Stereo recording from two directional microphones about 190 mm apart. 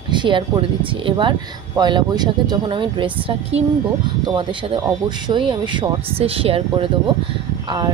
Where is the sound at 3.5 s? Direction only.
80° right.